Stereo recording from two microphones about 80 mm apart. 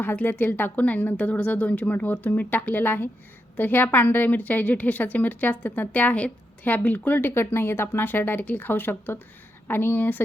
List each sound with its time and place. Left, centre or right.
0.0 s a woman's voice: left